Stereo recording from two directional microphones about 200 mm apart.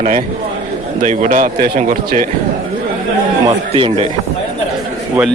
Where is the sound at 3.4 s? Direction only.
25° right (ahead or behind).